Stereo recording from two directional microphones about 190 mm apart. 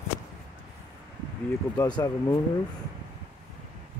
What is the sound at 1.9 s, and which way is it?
Speech, 20° left (ahead or behind).